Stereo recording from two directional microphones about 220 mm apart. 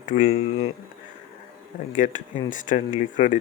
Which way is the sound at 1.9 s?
35° left (ahead or behind).